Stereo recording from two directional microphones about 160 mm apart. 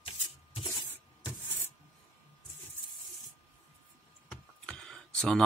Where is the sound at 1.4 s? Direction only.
15° left (ahead or behind).